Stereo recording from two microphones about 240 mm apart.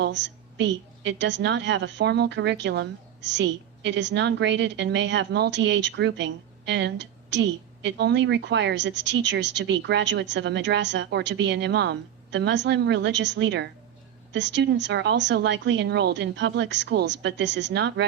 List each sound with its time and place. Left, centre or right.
0.0 s a woman's voice: right